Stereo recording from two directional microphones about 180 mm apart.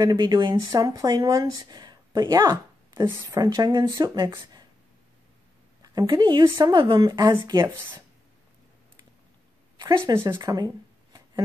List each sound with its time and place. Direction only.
0.0 s speech: 20° right (ahead or behind)
5.8 s speech: 20° right (ahead or behind)
9.8 s speech: 20° right (ahead or behind)